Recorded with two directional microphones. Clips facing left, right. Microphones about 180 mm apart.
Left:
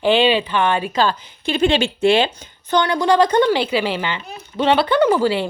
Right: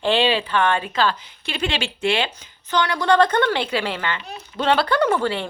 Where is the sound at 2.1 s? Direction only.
35° left (ahead or behind).